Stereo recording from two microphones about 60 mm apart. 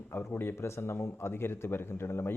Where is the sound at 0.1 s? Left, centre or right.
Left.